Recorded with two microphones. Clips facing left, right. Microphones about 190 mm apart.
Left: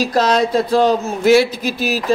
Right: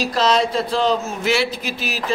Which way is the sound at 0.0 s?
50° left (ahead or behind).